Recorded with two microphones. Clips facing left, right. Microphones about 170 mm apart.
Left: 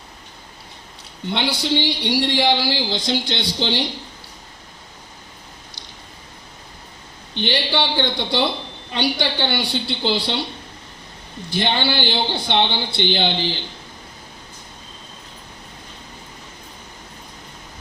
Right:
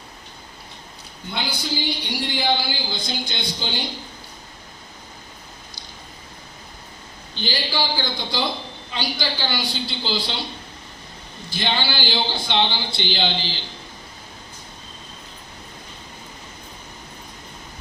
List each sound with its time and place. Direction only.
1.3 s speech: 75° left (ahead or behind)
7.3 s a woman's voice: 65° left (ahead or behind)
11.5 s a woman's voice: 60° left (ahead or behind)